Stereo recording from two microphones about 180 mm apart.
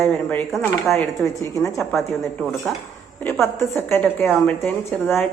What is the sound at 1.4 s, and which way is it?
Speech, 15° left (ahead or behind).